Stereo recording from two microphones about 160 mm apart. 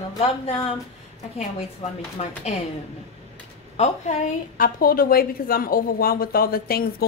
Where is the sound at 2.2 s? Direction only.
40° left (ahead or behind).